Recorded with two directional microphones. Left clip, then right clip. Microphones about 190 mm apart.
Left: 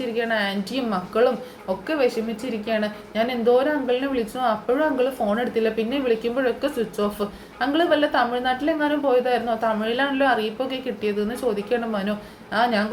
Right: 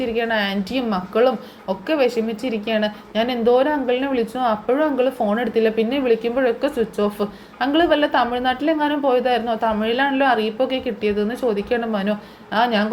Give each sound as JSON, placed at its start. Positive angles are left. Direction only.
{"t": 0.0, "sound": "a woman's voice", "side_deg": -25}